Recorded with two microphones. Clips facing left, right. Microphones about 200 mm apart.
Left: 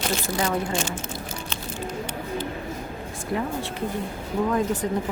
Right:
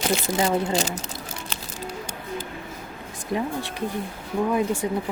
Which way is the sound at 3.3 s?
15° right (ahead or behind).